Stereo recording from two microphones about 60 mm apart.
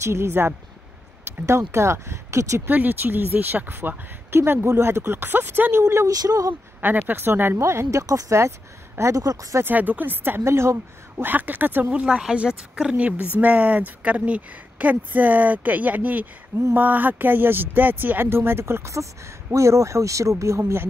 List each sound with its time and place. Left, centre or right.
0.0 s speech: right
2.7 s speech: right
6.0 s speech: right
6.8 s speech: right
7.5 s speech: right
8.1 s speech: right
9.2 s speech: right
9.7 s speech: right
10.4 s speech: right
11.2 s speech: right
11.9 s a woman's voice: centre; by 19.0 s right
19.5 s speech: right